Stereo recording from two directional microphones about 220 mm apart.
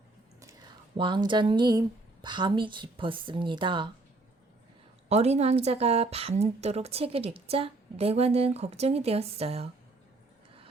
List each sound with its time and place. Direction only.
0.9 s a woman's voice: 20° right (ahead or behind)
5.0 s a woman's voice: 30° right (ahead or behind)